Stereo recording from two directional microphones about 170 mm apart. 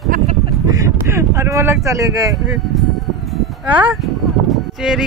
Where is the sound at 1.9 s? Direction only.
20° right (ahead or behind).